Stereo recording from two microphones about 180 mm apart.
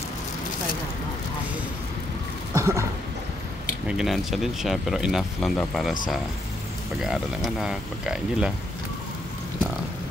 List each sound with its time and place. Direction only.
2.5 s a sound: 15° right (ahead or behind)
3.8 s speech: 5° right (ahead or behind)
7.0 s speech: 5° right (ahead or behind)